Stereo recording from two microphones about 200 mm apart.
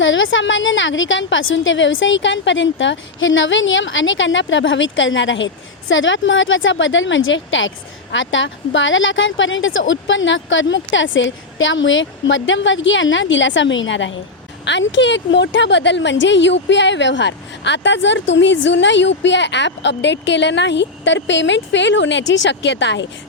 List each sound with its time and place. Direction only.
0.0 s a woman's voice: 70° left (ahead or behind)